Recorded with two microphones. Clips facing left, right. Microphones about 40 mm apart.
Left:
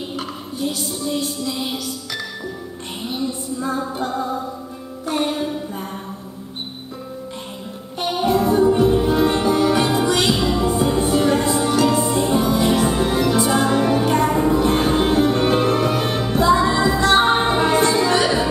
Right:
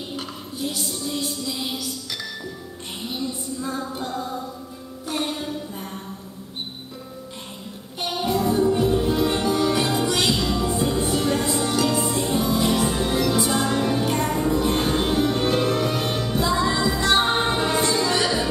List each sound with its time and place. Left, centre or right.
0.1 s music: centre
3.0 s music: centre
8.0 s music: centre